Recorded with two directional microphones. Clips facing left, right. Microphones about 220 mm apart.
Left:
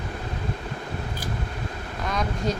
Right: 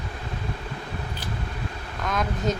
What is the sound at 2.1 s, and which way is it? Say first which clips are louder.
Speech: right 1 dB; centre (ahead or behind).